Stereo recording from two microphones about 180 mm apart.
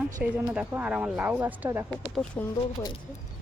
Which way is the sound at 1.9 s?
5° left (ahead or behind).